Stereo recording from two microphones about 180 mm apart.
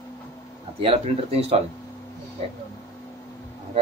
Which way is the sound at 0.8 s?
30° right (ahead or behind).